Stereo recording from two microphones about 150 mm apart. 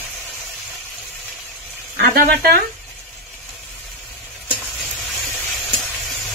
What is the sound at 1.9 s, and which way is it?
Speech, 90° right.